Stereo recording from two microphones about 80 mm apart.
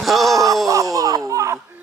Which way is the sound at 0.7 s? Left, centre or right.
Right.